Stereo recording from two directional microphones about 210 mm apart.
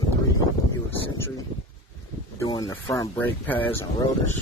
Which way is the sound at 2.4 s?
20° left (ahead or behind).